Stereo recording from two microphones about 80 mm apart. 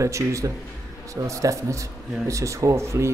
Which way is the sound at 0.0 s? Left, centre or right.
Right.